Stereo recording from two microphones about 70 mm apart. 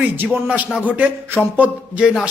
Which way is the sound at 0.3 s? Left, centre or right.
Right.